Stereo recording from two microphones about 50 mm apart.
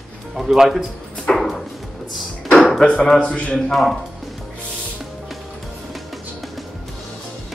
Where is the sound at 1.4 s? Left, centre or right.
Centre.